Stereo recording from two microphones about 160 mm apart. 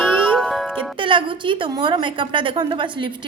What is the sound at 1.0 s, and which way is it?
A woman's voice, 30° right (ahead or behind).